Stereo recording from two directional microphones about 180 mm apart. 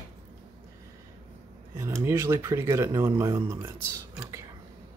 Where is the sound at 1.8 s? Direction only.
15° right (ahead or behind).